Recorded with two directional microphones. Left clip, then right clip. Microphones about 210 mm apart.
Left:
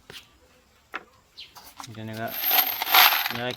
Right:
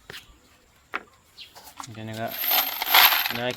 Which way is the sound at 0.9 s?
30° right (ahead or behind).